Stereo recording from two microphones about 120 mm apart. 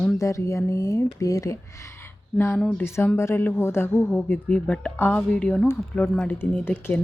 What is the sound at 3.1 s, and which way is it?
Speech, 20° left (ahead or behind).